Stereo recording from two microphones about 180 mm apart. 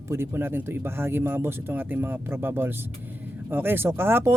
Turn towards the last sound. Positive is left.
turn(degrees=-10)  # may be behind; listen again after turning